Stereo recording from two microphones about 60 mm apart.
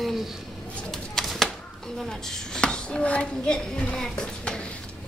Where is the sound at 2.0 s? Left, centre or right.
Centre.